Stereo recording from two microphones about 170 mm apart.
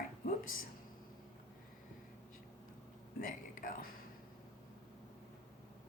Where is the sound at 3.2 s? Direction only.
55° left (ahead or behind).